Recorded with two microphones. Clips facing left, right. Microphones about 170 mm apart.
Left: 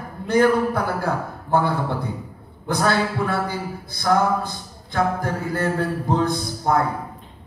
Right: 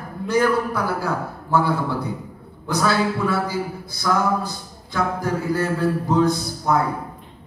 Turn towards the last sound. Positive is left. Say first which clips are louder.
# even
turn(degrees=55)  # may be behind; listen again after turning